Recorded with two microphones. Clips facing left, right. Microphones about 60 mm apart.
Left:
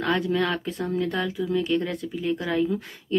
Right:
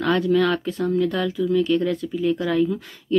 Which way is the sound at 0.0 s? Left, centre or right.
Centre.